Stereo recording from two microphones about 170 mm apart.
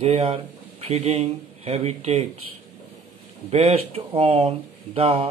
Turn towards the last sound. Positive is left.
turn(degrees=-35)  # may be behind; listen again after turning